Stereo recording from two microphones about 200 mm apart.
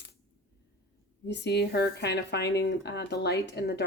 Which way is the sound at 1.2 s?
60° left (ahead or behind).